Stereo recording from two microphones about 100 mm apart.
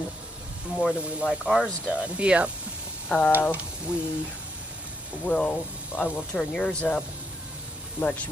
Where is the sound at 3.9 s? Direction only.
10° right (ahead or behind).